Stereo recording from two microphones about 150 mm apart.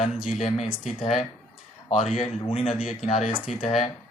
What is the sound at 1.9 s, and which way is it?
Speech, 35° left (ahead or behind).